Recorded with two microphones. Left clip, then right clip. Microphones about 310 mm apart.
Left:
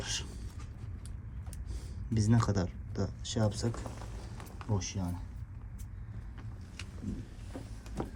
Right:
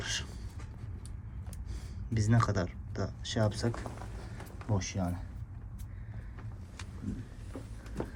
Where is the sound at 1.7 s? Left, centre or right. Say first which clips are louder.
Left 2 dB; centre.